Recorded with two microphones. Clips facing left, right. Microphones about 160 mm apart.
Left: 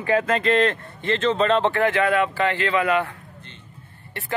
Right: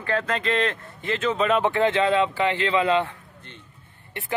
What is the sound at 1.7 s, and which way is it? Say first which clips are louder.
Speech: even; 20° right (ahead or behind).